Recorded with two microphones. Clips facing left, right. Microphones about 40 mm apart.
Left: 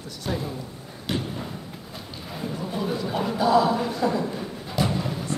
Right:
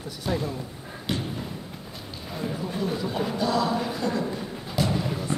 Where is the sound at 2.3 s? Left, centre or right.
Centre.